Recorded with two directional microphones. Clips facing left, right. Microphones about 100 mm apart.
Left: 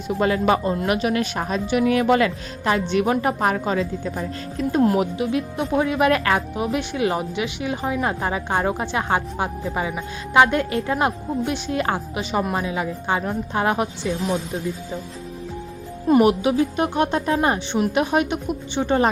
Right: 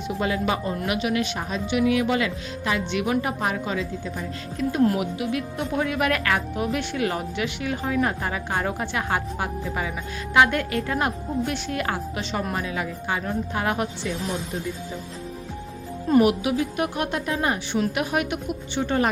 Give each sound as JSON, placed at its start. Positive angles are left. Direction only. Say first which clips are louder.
{"t": 0.2, "sound": "a woman's voice", "louder": "left 6 dB", "side_deg": 50}
{"t": 16.2, "sound": "speech", "louder": "left 4 dB", "side_deg": 30}